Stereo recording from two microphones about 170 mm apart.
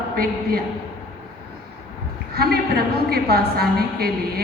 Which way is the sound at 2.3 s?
65° right (ahead or behind).